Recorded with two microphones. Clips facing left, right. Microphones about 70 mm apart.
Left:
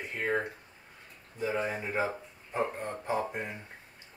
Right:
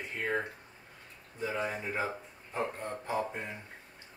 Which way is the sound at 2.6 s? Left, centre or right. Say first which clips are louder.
Left 3 dB; centre.